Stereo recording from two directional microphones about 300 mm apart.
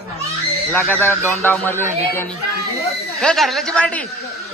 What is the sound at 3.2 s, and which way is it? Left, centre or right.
Speech, centre.